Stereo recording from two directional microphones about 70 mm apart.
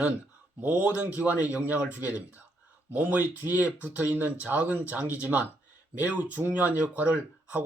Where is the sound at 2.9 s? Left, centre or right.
Right.